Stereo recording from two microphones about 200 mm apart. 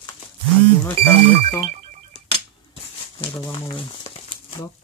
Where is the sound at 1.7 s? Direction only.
35° right (ahead or behind).